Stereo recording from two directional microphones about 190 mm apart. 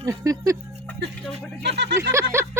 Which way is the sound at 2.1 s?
15° right (ahead or behind).